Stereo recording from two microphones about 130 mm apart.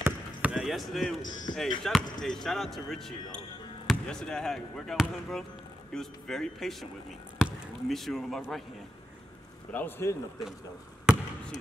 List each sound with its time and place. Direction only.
0.0 s basketball bounce: 10° right (ahead or behind)
1.5 s speech: 35° left (ahead or behind)
1.8 s speech: 5° left (ahead or behind)
7.9 s speech: centre (ahead or behind)
9.7 s a man's voice: 15° left (ahead or behind)
11.1 s basketball bounce: 5° right (ahead or behind)